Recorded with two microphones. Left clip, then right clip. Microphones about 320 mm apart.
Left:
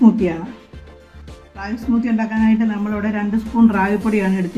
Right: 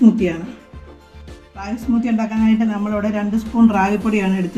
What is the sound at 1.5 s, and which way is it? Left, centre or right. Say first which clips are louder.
A man's voice: even; centre.